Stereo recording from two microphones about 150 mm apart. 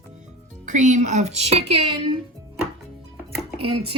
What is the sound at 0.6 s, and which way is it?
Speech, 55° right (ahead or behind).